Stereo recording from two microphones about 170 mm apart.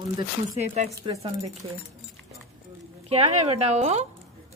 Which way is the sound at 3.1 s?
40° right (ahead or behind).